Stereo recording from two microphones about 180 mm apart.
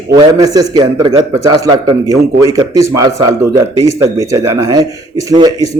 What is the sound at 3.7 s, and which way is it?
Speech, 20° left (ahead or behind).